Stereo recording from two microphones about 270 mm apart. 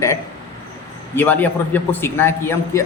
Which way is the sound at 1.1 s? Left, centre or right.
Centre.